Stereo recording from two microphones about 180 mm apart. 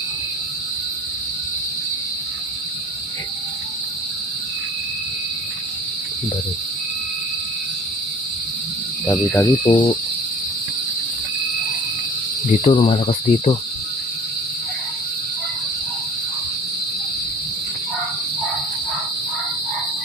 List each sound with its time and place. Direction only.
9.0 s speech: 10° left (ahead or behind)
9.7 s speech: 30° left (ahead or behind)
12.6 s speech: 30° left (ahead or behind)